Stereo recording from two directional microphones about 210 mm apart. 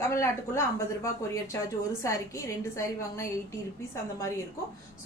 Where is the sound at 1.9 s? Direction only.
15° left (ahead or behind).